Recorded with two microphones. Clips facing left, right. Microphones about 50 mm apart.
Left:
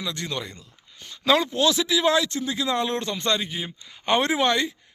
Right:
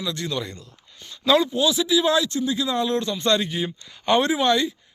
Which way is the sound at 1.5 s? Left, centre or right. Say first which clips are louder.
Right 1 dB; left.